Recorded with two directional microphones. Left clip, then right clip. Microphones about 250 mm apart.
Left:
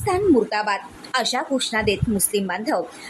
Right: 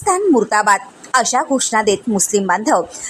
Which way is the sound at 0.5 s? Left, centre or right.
Centre.